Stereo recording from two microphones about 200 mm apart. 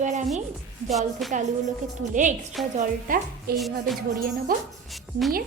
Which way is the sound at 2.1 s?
40° right (ahead or behind).